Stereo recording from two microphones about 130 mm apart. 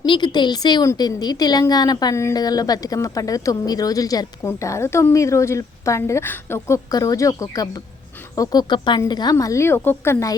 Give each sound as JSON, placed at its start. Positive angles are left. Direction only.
{"t": 0.0, "sound": "a woman's voice", "side_deg": 35}